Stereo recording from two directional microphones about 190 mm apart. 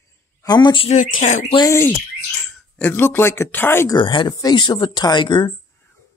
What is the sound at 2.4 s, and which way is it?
Speech, 5° left (ahead or behind).